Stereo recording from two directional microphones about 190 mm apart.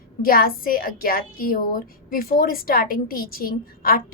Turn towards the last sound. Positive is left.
turn(degrees=50)  # may be behind; listen again after turning